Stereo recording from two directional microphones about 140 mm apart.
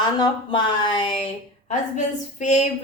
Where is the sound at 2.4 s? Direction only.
55° left (ahead or behind).